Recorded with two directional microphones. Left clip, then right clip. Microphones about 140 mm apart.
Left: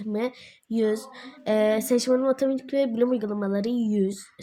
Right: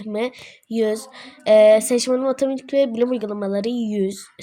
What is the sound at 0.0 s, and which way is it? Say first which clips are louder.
Speech: right 4 dB; 15° right (ahead or behind).